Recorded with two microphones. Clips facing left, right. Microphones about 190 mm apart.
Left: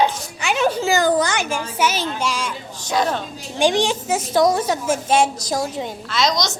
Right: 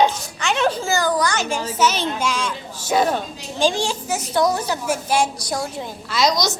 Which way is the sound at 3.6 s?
15° left (ahead or behind).